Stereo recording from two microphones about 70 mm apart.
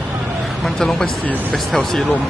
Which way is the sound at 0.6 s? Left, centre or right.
Centre.